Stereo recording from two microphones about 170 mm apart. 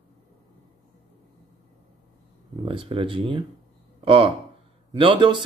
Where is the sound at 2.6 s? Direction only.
30° right (ahead or behind).